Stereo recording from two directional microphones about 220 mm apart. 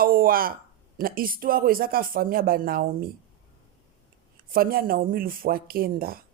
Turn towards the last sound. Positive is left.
turn(degrees=-40)  # may be behind; listen again after turning